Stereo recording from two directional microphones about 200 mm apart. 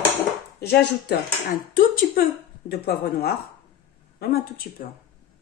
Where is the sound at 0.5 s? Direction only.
50° left (ahead or behind).